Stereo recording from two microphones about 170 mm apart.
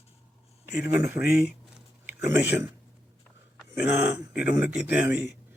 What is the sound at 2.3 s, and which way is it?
Speech, 10° right (ahead or behind).